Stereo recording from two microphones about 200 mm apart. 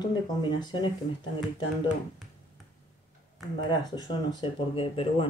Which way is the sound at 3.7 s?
20° left (ahead or behind).